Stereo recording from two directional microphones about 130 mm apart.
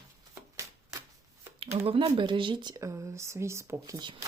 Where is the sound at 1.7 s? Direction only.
45° right (ahead or behind); by 4.0 s 25° right (ahead or behind).